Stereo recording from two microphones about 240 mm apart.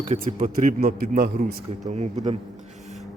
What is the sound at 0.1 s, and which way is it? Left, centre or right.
A man's voice, right.